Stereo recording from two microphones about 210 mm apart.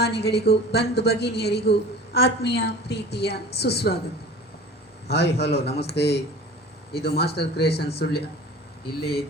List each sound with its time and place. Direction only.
0.0 s a woman's voice: 50° left (ahead or behind)
5.0 s a woman's voice: 50° left (ahead or behind)